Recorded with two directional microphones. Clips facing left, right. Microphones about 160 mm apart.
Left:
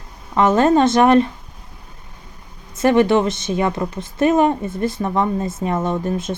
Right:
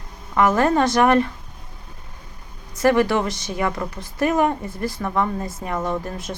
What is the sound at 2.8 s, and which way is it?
Speech, 25° left (ahead or behind).